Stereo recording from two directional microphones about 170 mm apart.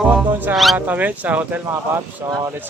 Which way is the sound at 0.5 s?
Centre (ahead or behind).